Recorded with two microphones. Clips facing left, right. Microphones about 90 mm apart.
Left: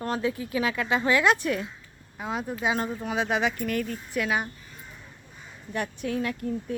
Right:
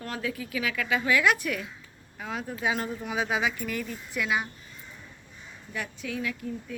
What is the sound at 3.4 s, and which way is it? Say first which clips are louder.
A woman's voice: left 3 dB; 50° left (ahead or behind).